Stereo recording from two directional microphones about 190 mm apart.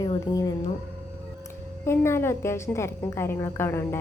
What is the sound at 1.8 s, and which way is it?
A woman's voice, 15° left (ahead or behind).